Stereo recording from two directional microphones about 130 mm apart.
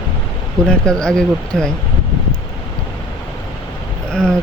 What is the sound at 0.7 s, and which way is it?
Speech, 5° left (ahead or behind).